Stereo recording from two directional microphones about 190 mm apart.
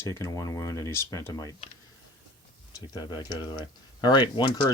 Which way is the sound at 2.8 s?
20° left (ahead or behind).